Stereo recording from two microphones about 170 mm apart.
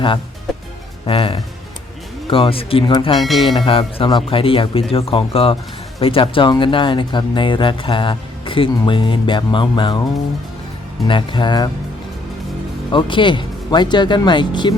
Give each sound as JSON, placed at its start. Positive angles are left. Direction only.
{"t": 1.0, "sound": "speech", "side_deg": 30}
{"t": 3.2, "sound": "speech", "side_deg": 0}
{"t": 3.7, "sound": "speech", "side_deg": 30}
{"t": 11.0, "sound": "speech", "side_deg": 30}
{"t": 12.9, "sound": "speech", "side_deg": 30}